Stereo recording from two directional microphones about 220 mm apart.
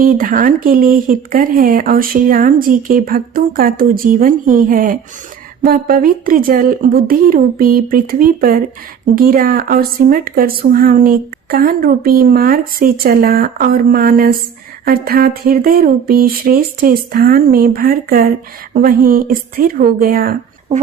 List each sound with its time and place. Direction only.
0.0 s speech: 40° right (ahead or behind)